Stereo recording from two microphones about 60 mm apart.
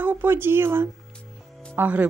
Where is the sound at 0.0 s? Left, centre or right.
Right.